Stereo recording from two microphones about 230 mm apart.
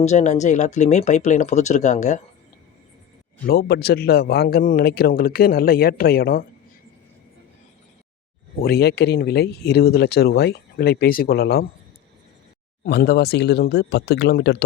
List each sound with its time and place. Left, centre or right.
0.0 s a man's voice: left
3.4 s a man's voice: left
8.6 s speech: left
12.8 s speech: left